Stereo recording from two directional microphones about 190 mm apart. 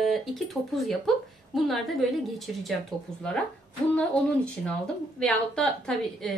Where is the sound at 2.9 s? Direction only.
20° right (ahead or behind).